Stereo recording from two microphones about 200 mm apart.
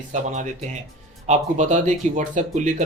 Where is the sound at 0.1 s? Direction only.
35° right (ahead or behind).